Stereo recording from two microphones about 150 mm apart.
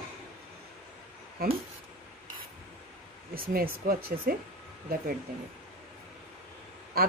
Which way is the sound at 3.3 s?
75° right (ahead or behind).